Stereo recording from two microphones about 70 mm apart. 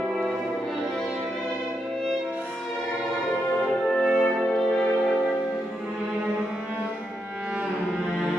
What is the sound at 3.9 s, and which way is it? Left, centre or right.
Music, centre.